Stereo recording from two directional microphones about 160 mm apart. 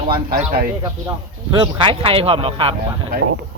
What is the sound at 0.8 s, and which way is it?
Speech, 25° right (ahead or behind).